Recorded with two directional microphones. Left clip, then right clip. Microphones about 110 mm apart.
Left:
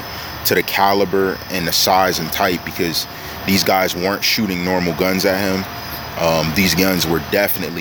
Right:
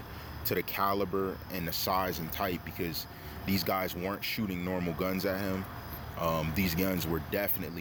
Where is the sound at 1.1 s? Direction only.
50° left (ahead or behind).